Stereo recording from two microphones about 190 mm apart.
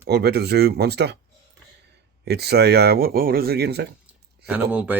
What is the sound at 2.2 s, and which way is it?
Speech, 60° right (ahead or behind).